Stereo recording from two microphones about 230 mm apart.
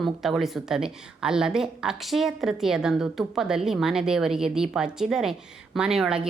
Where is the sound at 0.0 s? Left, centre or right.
Centre.